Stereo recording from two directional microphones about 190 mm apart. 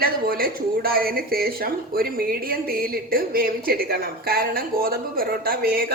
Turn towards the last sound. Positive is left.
turn(degrees=-50)  # may be behind; listen again after turning